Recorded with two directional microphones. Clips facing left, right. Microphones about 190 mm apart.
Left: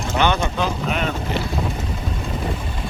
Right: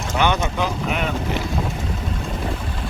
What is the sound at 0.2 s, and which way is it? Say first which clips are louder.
Speech: even; 10° right (ahead or behind).